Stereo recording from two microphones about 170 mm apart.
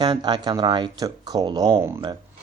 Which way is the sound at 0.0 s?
25° right (ahead or behind).